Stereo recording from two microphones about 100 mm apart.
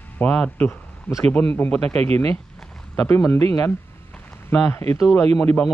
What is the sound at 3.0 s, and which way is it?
Speech, 20° left (ahead or behind).